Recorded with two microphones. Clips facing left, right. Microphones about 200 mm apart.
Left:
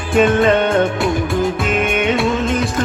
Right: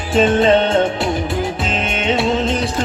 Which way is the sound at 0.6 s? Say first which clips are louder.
Left 1 dB; 50° left (ahead or behind).